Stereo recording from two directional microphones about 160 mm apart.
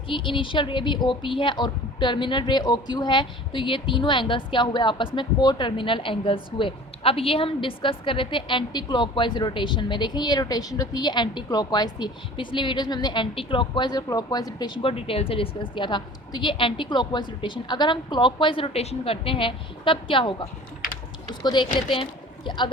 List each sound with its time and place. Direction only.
0.1 s a woman's voice: 30° left (ahead or behind)
21.4 s a woman's voice: 30° left (ahead or behind)